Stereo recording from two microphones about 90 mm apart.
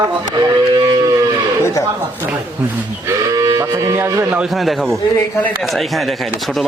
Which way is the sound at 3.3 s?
35° right (ahead or behind).